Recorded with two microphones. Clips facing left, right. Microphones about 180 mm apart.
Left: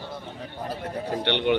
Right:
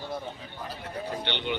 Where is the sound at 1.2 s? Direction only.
65° left (ahead or behind).